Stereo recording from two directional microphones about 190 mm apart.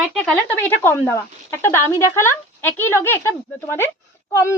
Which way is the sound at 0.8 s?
10° left (ahead or behind).